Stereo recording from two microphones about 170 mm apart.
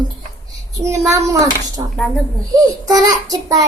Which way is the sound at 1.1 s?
20° right (ahead or behind).